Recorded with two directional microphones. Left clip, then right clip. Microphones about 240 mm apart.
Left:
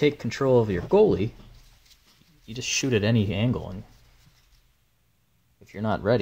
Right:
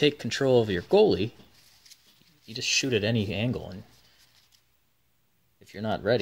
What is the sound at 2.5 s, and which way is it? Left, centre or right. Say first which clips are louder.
Speech: even; centre.